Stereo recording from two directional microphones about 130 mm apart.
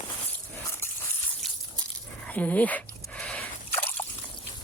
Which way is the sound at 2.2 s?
10° left (ahead or behind).